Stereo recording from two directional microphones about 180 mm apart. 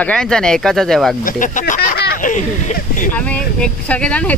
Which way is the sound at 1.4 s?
50° left (ahead or behind).